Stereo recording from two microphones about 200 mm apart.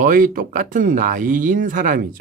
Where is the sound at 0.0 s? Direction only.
40° right (ahead or behind).